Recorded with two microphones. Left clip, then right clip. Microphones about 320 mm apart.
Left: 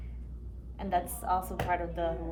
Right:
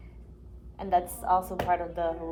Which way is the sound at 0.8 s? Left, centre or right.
Centre.